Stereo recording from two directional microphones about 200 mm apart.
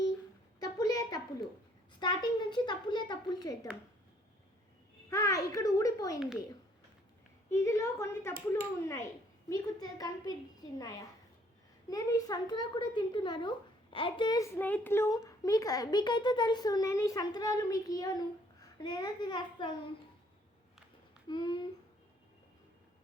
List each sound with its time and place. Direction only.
0.6 s a sound: 20° left (ahead or behind)
2.0 s a child's voice: 20° left (ahead or behind)
5.0 s a woman's voice: 15° left (ahead or behind)
7.5 s a woman's voice: 15° left (ahead or behind)
9.5 s a woman's voice: 20° left (ahead or behind)
21.2 s speech: 25° left (ahead or behind)